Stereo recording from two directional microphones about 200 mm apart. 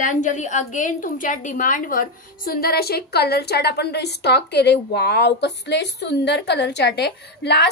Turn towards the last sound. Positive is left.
turn(degrees=55)  # may be behind; listen again after turning